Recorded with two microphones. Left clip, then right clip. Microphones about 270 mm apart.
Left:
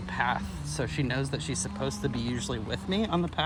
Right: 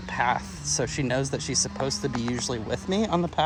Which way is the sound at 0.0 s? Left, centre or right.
Right.